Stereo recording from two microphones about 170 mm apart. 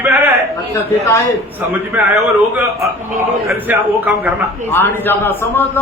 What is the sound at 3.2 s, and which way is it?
A man's voice, 10° right (ahead or behind).